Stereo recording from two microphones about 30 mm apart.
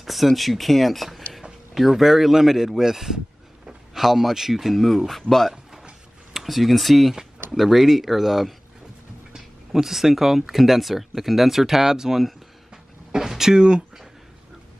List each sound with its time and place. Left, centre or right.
0.0 s speech: centre
5.5 s a sound: centre
6.3 s speech: centre
9.8 s speech: centre
13.6 s speech: right